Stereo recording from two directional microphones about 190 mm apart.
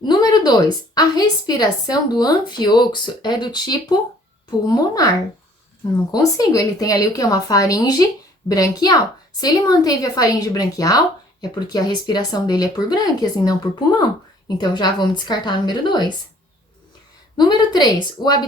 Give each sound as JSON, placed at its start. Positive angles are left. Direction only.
{"t": 0.0, "sound": "speech", "side_deg": 20}
{"t": 17.3, "sound": "speech", "side_deg": 20}